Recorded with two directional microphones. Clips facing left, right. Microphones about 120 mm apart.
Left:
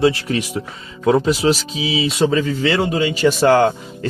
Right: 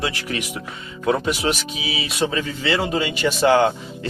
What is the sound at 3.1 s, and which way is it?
Speech, 40° left (ahead or behind).